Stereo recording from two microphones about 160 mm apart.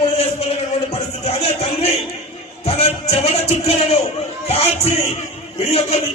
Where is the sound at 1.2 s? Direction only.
40° left (ahead or behind).